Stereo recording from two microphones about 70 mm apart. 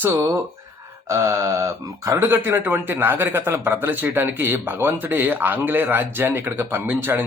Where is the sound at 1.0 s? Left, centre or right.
Right.